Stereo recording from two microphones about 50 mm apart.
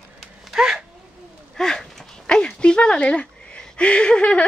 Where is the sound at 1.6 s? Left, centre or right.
Centre.